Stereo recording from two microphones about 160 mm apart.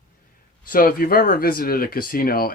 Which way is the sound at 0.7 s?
65° left (ahead or behind).